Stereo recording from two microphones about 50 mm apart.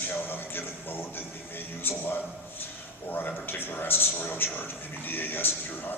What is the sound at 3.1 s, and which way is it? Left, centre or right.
A man's voice, left.